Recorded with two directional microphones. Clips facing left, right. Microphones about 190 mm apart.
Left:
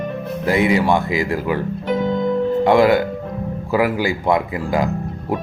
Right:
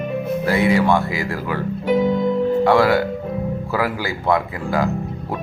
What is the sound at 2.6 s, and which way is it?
Speech, 15° left (ahead or behind).